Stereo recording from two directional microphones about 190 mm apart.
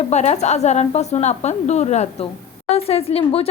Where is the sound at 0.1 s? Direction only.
35° left (ahead or behind).